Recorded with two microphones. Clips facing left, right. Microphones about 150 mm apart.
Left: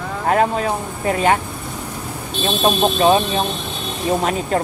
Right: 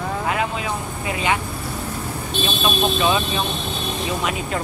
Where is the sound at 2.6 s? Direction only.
40° left (ahead or behind).